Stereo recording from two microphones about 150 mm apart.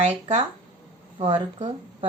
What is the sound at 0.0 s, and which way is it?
Speech, 50° right (ahead or behind).